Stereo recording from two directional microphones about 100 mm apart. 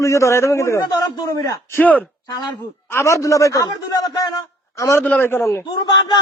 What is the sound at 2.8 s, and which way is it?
A man's voice, 30° left (ahead or behind).